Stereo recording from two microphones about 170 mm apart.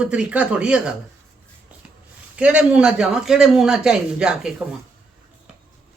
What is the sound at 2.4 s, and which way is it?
Speech, 5° right (ahead or behind).